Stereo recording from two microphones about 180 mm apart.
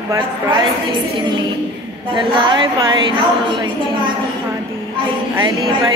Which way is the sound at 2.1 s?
25° right (ahead or behind).